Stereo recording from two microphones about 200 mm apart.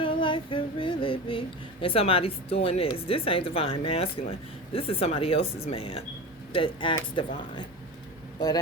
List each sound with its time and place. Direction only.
0.0 s female singing: 25° left (ahead or behind)
8.4 s female singing: 20° left (ahead or behind)